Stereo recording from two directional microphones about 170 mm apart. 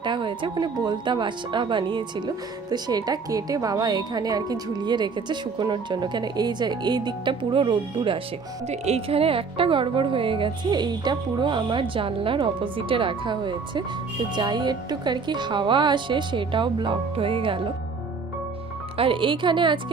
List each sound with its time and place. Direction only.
0.0 s a woman's voice: 30° right (ahead or behind)
18.9 s speech: 30° right (ahead or behind)